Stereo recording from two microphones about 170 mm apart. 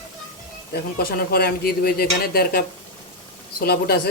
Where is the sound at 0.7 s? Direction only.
65° left (ahead or behind).